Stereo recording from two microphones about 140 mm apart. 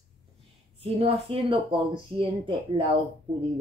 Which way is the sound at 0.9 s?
40° right (ahead or behind).